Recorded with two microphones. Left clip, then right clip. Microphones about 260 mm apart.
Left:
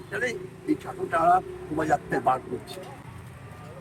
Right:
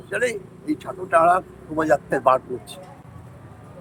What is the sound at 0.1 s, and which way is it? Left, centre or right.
A man's voice, right.